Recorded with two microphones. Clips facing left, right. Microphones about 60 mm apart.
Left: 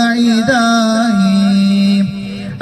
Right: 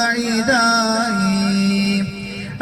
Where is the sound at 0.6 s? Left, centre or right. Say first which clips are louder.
Left 5 dB; right.